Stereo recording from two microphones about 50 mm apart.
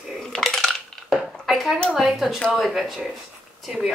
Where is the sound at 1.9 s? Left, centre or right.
Centre.